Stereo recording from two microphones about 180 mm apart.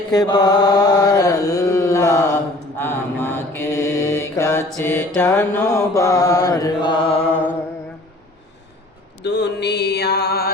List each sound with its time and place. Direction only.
0.1 s mantra: 20° left (ahead or behind)
9.2 s mantra: 70° left (ahead or behind)